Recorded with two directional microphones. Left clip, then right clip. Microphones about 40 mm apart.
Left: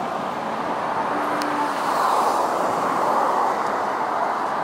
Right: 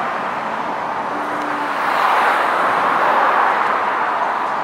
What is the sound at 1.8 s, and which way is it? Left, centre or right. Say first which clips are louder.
Vehicle: right 6 dB; right.